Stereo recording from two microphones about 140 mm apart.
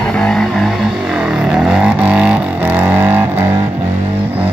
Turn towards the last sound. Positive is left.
turn(degrees=-15)  # may be behind; listen again after turning